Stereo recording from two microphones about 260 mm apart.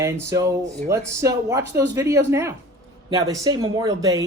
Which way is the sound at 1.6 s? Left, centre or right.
Right.